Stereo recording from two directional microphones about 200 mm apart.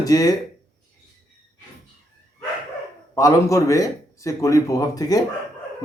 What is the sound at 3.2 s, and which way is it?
Speech, 15° left (ahead or behind).